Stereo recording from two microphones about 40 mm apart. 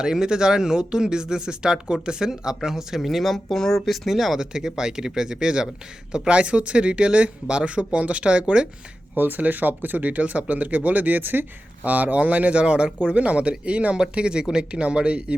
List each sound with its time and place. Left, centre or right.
0.0 s speech: centre
4.4 s speech: centre
9.1 s speech: right
11.8 s speech: right